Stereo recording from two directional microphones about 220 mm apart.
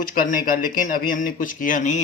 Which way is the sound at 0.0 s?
40° left (ahead or behind).